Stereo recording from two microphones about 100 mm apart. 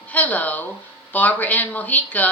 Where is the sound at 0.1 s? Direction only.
15° left (ahead or behind).